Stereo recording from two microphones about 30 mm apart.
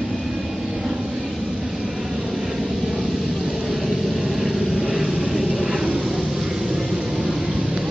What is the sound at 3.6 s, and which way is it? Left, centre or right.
Vehicle, centre.